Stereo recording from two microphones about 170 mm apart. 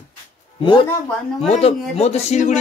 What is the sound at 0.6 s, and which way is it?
Speech, 25° left (ahead or behind).